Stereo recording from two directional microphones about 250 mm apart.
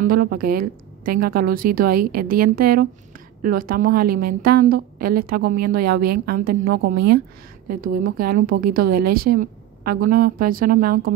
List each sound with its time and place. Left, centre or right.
0.0 s a woman's voice: right